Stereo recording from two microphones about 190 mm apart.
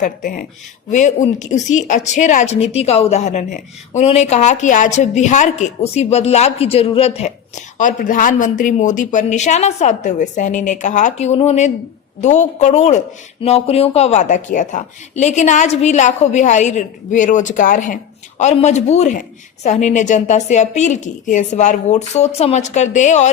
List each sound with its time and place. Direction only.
0.0 s a woman's voice: 45° left (ahead or behind)